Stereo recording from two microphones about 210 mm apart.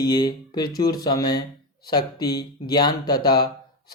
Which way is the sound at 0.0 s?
20° left (ahead or behind).